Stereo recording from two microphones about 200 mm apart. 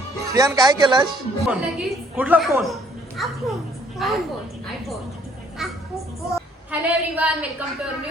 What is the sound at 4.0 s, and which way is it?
Speech, centre (ahead or behind).